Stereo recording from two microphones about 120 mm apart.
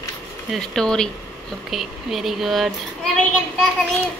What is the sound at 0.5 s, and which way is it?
Speech, 5° left (ahead or behind).